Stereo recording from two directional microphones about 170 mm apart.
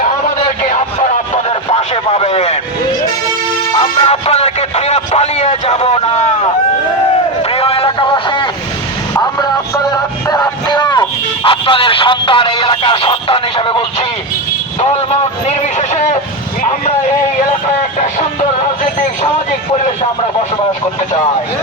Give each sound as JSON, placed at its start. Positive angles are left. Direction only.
{"t": 1.5, "sound": "a sound", "side_deg": 35}
{"t": 3.8, "sound": "music", "side_deg": 35}
{"t": 7.5, "sound": "a sound", "side_deg": 35}
{"t": 9.1, "sound": "music", "side_deg": 20}
{"t": 14.8, "sound": "vehicle", "side_deg": 40}
{"t": 18.3, "sound": "music", "side_deg": 40}